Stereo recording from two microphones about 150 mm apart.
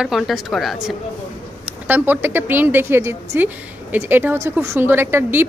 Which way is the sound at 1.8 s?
15° right (ahead or behind).